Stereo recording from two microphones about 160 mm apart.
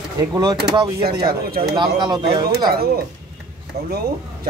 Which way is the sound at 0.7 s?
25° right (ahead or behind).